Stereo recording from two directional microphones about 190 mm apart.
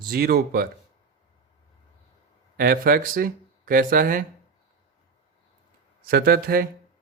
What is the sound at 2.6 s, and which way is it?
Speech, 50° right (ahead or behind).